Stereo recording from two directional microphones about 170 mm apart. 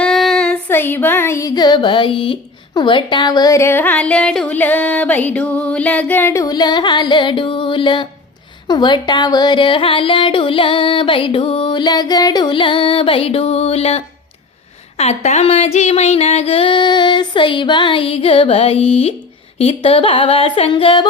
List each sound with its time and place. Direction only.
0.0 s child singing: centre (ahead or behind); by 8.0 s 30° left (ahead or behind)
8.6 s music: 25° left (ahead or behind)
14.9 s a sound: 40° left (ahead or behind)